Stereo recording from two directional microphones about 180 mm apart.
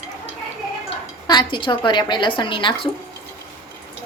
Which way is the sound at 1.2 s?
25° left (ahead or behind).